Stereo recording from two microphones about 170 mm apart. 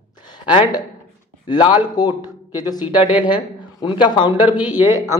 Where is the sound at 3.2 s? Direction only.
25° left (ahead or behind).